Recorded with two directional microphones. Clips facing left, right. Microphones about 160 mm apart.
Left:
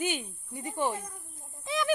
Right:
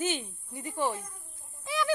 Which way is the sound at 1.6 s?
20° left (ahead or behind).